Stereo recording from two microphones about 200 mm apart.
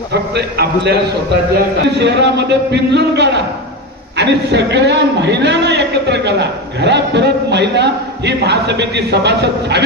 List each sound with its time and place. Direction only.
0.1 s a man's voice: 55° right (ahead or behind)